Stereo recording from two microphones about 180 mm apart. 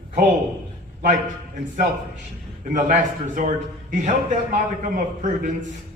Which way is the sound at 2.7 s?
45° right (ahead or behind).